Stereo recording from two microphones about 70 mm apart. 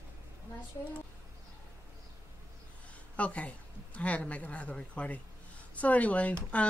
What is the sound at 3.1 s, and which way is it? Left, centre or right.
Speech, centre.